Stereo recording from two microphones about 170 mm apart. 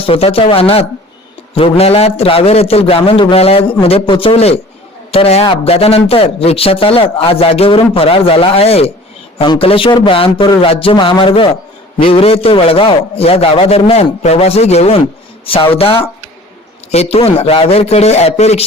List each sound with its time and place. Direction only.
0.0 s a man's voice: 35° left (ahead or behind)